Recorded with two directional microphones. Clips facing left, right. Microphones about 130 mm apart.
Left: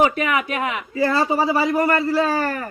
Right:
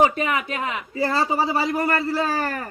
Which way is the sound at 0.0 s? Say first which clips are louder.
Left 1 dB; 35° right (ahead or behind).